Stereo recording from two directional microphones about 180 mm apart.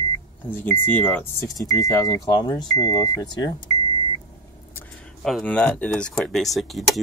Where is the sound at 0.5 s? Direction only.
10° left (ahead or behind).